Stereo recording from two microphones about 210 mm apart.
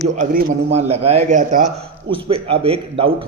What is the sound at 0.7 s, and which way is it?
A man's voice, 30° right (ahead or behind).